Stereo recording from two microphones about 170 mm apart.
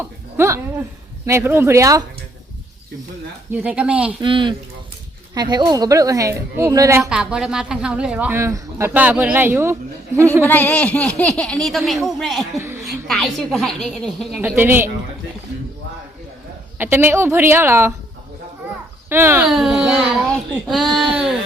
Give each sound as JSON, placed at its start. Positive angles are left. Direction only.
{"t": 0.0, "sound": "speech", "side_deg": -15}
{"t": 3.5, "sound": "speech", "side_deg": -10}
{"t": 4.2, "sound": "a woman's voice", "side_deg": -30}
{"t": 7.1, "sound": "speech", "side_deg": -5}
{"t": 10.4, "sound": "a child's voice", "side_deg": 10}
{"t": 12.5, "sound": "speech", "side_deg": -15}
{"t": 12.8, "sound": "a child's voice", "side_deg": 0}
{"t": 14.4, "sound": "speech", "side_deg": -10}
{"t": 16.7, "sound": "speech", "side_deg": -10}
{"t": 19.0, "sound": "speech", "side_deg": -15}
{"t": 19.5, "sound": "a child's voice", "side_deg": 0}